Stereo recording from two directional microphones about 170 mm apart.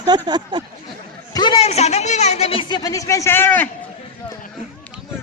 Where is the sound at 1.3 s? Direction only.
25° left (ahead or behind); by 3.7 s 10° left (ahead or behind).